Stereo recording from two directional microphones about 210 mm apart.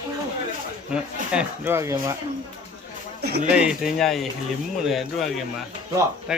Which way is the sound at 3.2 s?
50° right (ahead or behind).